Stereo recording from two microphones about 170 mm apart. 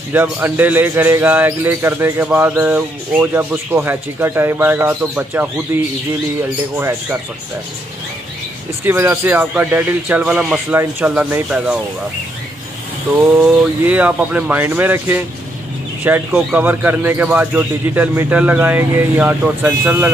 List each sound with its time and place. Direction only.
0.1 s speech: 10° right (ahead or behind)
6.8 s speech: 15° right (ahead or behind)
8.8 s speech: 10° right (ahead or behind)
13.2 s speech: 10° right (ahead or behind)